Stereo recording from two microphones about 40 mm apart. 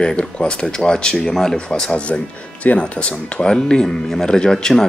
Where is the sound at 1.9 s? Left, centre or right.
Left.